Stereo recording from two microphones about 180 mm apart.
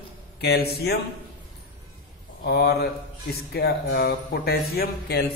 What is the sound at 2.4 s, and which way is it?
A man's voice, 65° left (ahead or behind).